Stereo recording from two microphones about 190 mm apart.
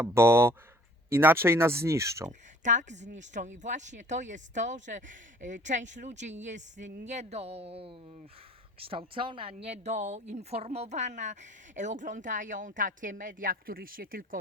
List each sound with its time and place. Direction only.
0.0 s speech: 15° right (ahead or behind)
2.6 s speech: 40° right (ahead or behind)